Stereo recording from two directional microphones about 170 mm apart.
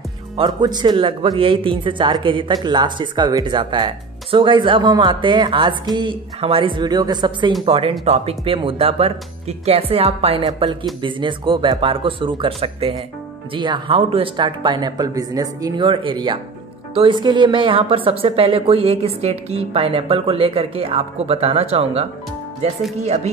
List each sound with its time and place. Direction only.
0.4 s a woman's voice: 25° right (ahead or behind)